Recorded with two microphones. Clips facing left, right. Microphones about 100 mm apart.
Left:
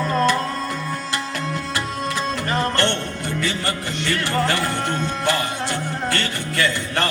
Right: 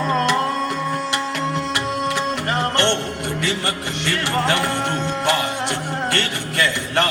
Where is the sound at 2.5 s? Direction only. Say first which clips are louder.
Right 1 dB; 20° right (ahead or behind).